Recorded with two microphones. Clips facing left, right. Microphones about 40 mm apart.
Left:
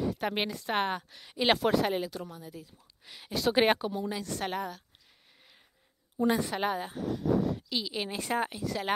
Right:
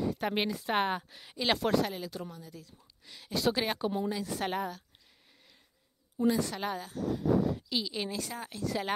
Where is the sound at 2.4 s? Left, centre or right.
Centre.